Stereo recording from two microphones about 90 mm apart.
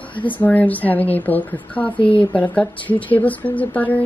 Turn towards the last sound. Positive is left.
turn(degrees=15)  # may be behind; listen again after turning